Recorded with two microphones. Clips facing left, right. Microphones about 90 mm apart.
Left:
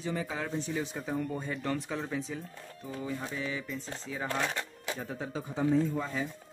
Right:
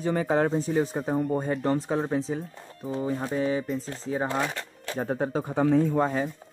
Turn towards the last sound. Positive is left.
turn(degrees=-50)  # may be behind; listen again after turning